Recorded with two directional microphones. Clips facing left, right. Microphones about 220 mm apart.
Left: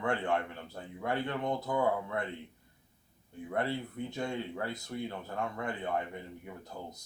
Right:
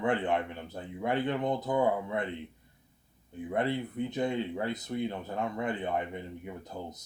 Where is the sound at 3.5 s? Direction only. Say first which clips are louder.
Right 3 dB; 20° right (ahead or behind).